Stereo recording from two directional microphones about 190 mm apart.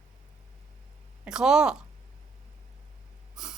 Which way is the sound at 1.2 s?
5° right (ahead or behind).